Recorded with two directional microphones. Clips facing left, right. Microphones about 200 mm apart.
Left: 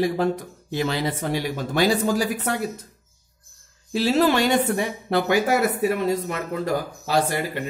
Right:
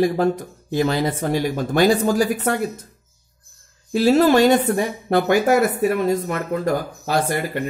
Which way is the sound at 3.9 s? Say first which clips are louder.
Right 5 dB; 50° right (ahead or behind).